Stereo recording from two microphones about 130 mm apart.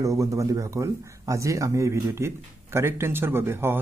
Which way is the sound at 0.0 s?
25° right (ahead or behind).